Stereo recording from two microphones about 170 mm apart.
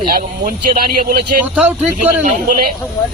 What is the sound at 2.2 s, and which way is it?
Speech, 50° right (ahead or behind).